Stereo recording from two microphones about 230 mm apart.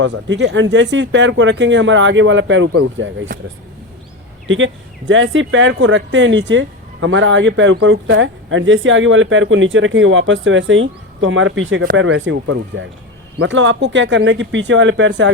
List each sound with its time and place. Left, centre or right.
0.0 s speech: right
4.4 s speech: right